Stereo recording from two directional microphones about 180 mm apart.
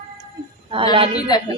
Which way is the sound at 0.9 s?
30° right (ahead or behind).